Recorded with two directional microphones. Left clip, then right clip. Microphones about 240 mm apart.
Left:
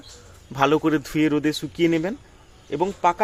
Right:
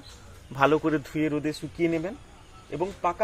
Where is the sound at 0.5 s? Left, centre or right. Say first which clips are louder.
Left 3 dB; centre.